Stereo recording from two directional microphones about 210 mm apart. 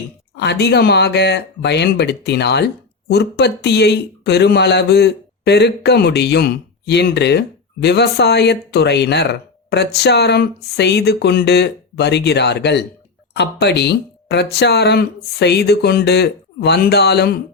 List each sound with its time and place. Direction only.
0.3 s speech: 55° left (ahead or behind)